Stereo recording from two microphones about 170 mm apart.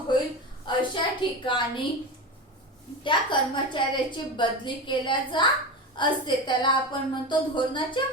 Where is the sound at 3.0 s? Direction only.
30° left (ahead or behind).